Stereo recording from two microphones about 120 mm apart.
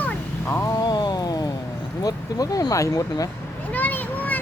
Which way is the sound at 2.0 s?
30° left (ahead or behind).